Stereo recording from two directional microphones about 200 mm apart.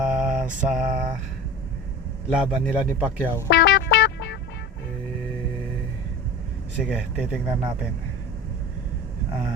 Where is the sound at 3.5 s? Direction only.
60° left (ahead or behind).